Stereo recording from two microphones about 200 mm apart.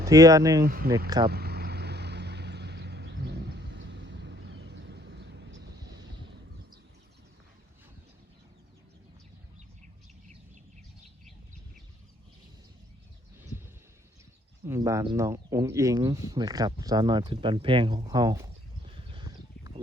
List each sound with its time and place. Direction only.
0.0 s speech: 15° right (ahead or behind)
0.6 s speech: 50° right (ahead or behind)
1.3 s vehicle: 50° right (ahead or behind)
14.6 s speech: 15° right (ahead or behind)
18.9 s a sound: 25° right (ahead or behind)